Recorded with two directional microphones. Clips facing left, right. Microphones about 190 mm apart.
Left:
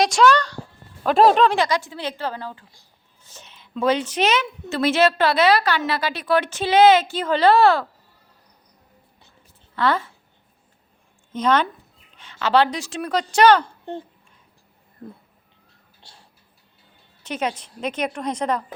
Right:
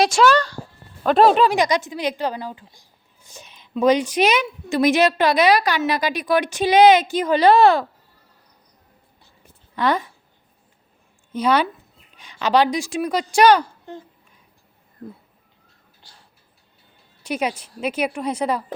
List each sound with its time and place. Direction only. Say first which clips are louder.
0.0 s a woman's voice: right 1 dB; 5° right (ahead or behind)
9.7 s a woman's voice: right 1 dB; 15° right (ahead or behind)
11.3 s a woman's voice: right 1 dB; 10° right (ahead or behind)
17.2 s a woman's voice: right 2 dB; 10° right (ahead or behind)